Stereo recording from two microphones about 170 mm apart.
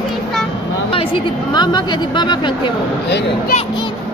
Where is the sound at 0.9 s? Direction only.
30° left (ahead or behind).